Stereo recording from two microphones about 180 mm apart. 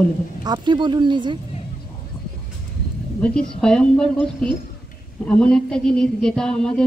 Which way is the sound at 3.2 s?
5° left (ahead or behind).